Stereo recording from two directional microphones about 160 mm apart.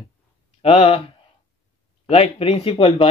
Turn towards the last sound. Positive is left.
turn(degrees=35)  # may be behind; listen again after turning